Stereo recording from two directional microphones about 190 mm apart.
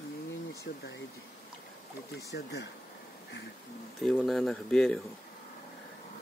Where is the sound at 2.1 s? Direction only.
65° left (ahead or behind).